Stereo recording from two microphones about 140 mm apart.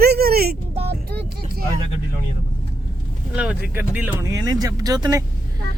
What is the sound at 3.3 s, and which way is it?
Speech, 10° right (ahead or behind).